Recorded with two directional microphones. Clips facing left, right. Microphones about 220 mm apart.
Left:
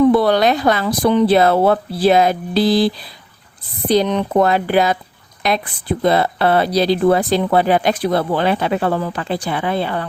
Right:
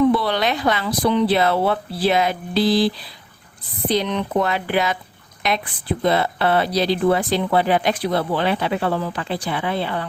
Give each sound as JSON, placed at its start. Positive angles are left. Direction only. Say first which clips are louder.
{"t": 0.1, "sound": "speech", "louder": "left 6 dB", "side_deg": 45}